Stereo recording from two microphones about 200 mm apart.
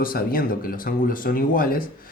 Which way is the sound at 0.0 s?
45° left (ahead or behind).